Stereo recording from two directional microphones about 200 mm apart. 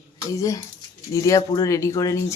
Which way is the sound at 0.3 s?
15° left (ahead or behind).